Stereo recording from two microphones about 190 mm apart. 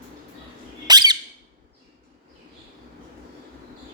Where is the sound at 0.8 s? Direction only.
20° right (ahead or behind).